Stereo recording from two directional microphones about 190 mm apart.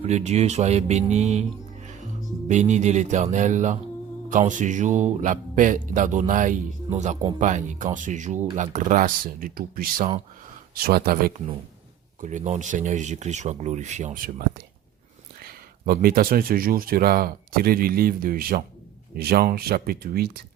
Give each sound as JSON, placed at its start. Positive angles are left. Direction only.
{"t": 0.0, "sound": "speech", "side_deg": -35}
{"t": 2.5, "sound": "speech", "side_deg": -40}
{"t": 12.2, "sound": "speech", "side_deg": -40}